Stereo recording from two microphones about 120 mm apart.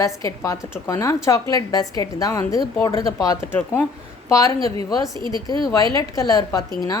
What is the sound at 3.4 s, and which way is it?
A woman's voice, 15° left (ahead or behind).